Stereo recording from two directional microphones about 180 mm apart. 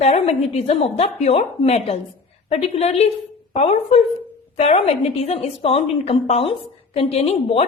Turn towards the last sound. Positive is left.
turn(degrees=35)  # may be behind; listen again after turning